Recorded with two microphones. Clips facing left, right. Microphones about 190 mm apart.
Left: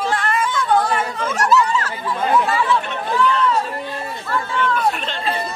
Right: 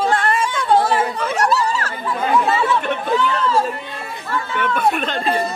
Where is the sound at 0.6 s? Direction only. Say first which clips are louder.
Right 4 dB; 25° right (ahead or behind).